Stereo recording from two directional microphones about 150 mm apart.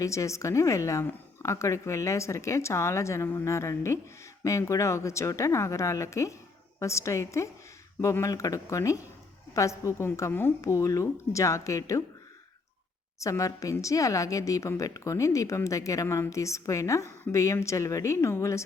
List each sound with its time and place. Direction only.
0.0 s speech: 20° left (ahead or behind)
13.1 s speech: 20° left (ahead or behind)